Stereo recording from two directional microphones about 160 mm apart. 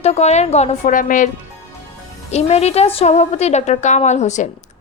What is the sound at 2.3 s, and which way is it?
A woman's voice, 40° left (ahead or behind).